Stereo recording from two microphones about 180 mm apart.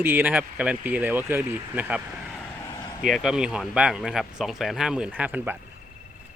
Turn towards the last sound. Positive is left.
turn(degrees=-10)  # may be behind; listen again after turning